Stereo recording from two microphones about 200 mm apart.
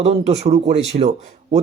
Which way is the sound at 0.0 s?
30° right (ahead or behind).